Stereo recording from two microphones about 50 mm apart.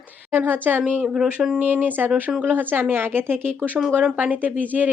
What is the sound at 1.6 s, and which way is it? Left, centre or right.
A woman's voice, right.